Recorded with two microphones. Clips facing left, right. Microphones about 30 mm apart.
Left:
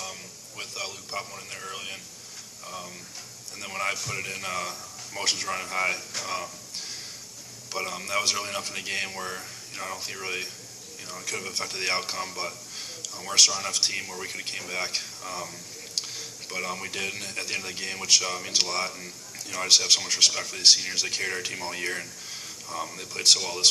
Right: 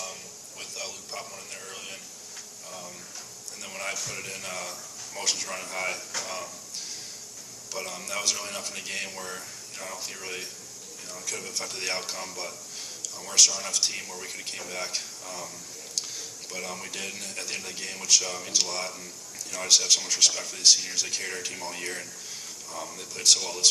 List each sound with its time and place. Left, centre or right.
0.8 s speech: left
1.3 s a man's voice: left
16.0 s a sound: left
16.5 s speech: left
16.7 s speech: left
17.0 s speech: left